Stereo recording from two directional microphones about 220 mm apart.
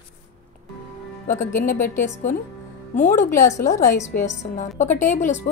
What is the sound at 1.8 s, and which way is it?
Speech, 10° left (ahead or behind).